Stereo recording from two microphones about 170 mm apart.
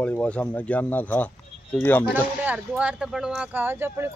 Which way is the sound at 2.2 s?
10° right (ahead or behind).